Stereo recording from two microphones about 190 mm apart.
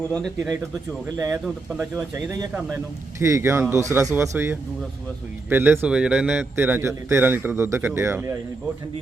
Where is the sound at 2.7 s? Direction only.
15° right (ahead or behind).